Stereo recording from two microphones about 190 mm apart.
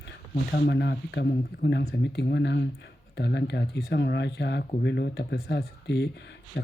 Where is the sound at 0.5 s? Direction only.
60° left (ahead or behind).